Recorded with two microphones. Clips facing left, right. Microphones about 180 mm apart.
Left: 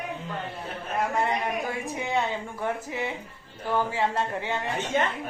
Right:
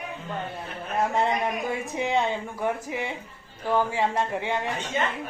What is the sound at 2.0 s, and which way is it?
Speech, 20° right (ahead or behind).